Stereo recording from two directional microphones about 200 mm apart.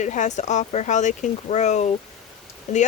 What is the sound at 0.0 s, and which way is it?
Speech, 35° left (ahead or behind).